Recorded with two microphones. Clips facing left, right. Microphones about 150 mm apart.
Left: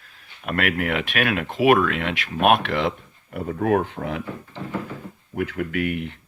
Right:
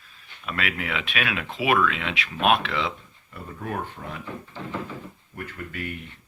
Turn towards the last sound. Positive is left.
turn(degrees=75)  # may be behind; listen again after turning